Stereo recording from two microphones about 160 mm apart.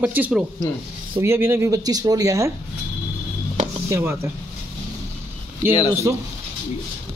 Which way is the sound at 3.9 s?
15° right (ahead or behind).